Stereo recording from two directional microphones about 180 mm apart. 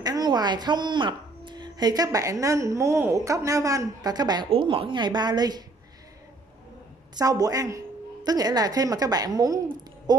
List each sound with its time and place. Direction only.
0.0 s a woman's voice: 20° right (ahead or behind)
7.2 s a woman's voice: 20° right (ahead or behind)